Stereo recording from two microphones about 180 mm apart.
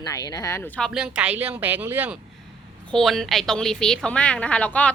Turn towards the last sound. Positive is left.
turn(degrees=5)  # may be behind; listen again after turning